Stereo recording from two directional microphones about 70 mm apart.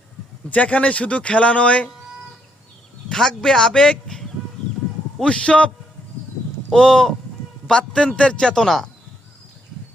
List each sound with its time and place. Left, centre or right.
0.5 s speech: centre
3.1 s a man's voice: centre